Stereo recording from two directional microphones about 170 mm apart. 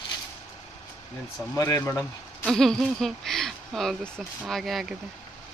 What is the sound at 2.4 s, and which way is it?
Speech, 5° left (ahead or behind).